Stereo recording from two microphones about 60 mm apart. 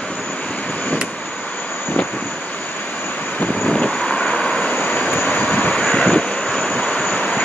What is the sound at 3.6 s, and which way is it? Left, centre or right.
Vehicle, centre.